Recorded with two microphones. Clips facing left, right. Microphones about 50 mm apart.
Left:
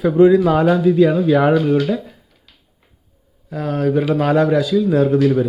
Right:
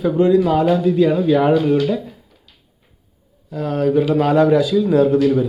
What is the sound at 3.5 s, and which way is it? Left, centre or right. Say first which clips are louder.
Speech: right 1 dB; centre.